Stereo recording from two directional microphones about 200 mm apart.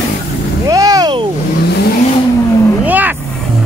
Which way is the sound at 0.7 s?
20° right (ahead or behind).